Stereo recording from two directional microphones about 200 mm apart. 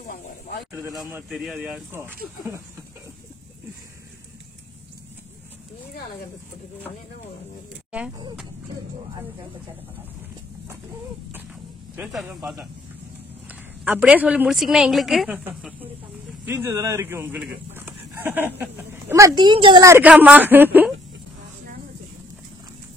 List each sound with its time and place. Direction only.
0.1 s speech: 55° left (ahead or behind)
0.7 s a woman's voice: 10° right (ahead or behind)
11.9 s speech: 5° right (ahead or behind)
13.8 s a woman's voice: 10° right (ahead or behind)
17.7 s a sound: 10° right (ahead or behind)
18.6 s a woman's voice: 10° right (ahead or behind)